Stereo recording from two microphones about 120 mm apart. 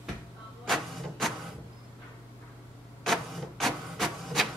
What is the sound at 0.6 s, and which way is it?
Printer, centre (ahead or behind).